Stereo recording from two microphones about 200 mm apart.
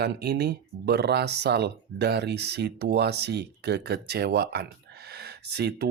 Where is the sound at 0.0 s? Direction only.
55° right (ahead or behind).